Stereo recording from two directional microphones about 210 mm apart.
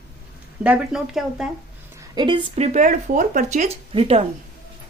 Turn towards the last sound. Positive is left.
turn(degrees=-25)  # may be behind; listen again after turning